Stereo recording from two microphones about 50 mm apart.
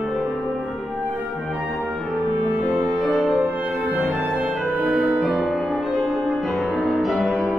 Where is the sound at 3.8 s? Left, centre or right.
Right.